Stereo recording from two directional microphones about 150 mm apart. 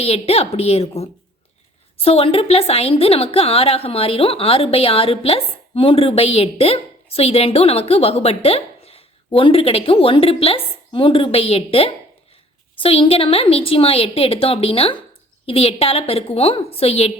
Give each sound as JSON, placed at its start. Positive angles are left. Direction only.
{"t": 0.0, "sound": "a woman's voice", "side_deg": 45}